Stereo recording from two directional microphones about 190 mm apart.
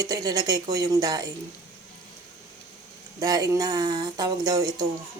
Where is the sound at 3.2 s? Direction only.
20° right (ahead or behind).